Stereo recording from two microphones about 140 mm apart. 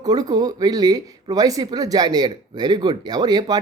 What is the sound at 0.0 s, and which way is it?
Speech, 30° right (ahead or behind).